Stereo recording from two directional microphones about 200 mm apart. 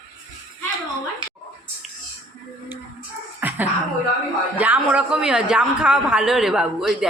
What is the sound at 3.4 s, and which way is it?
Dog, 10° right (ahead or behind).